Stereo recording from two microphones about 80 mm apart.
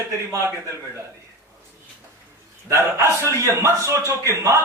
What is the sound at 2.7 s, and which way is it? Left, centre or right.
A man's voice, right.